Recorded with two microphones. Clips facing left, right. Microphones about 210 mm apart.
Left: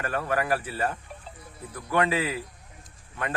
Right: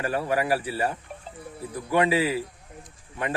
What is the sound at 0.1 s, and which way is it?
Speech, 15° right (ahead or behind).